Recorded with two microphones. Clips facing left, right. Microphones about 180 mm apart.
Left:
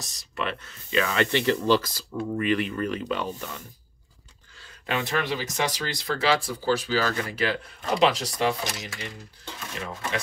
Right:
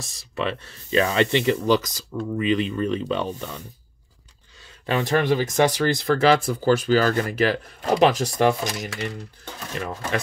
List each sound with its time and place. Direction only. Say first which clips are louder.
0.0 s speech: right 4 dB; 25° right (ahead or behind)
4.9 s speech: right 7 dB; 45° right (ahead or behind)